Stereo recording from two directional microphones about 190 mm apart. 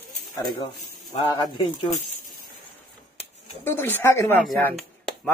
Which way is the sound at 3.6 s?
10° left (ahead or behind).